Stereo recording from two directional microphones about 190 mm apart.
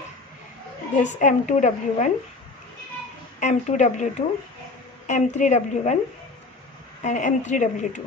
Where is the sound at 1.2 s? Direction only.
40° left (ahead or behind).